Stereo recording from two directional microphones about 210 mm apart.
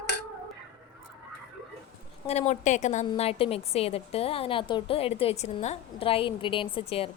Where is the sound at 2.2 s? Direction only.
30° left (ahead or behind).